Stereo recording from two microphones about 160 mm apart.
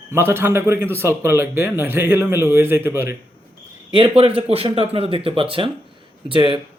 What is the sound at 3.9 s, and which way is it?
Speech, 35° right (ahead or behind).